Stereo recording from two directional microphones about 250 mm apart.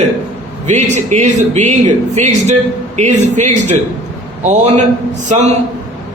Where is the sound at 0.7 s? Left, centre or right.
Right.